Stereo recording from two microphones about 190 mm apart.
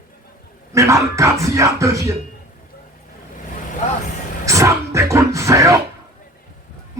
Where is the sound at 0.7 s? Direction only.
15° right (ahead or behind).